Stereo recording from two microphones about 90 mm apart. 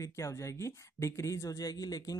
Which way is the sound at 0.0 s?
35° left (ahead or behind).